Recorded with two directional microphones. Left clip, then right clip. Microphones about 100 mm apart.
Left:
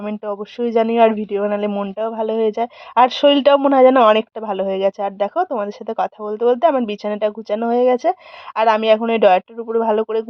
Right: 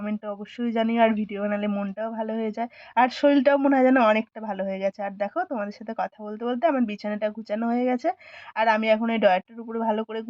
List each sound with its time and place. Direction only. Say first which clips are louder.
0.0 s speech: left 8 dB; 30° left (ahead or behind)